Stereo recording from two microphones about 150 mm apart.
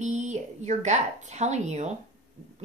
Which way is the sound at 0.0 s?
50° right (ahead or behind).